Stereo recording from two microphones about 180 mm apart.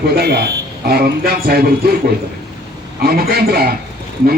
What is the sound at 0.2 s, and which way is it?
Speech, 65° right (ahead or behind).